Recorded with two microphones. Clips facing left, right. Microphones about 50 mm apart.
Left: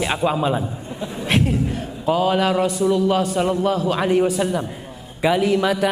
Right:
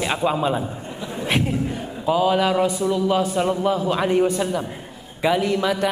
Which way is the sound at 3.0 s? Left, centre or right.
Centre.